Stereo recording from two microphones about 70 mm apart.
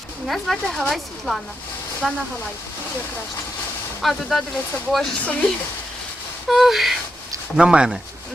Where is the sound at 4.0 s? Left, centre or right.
Centre.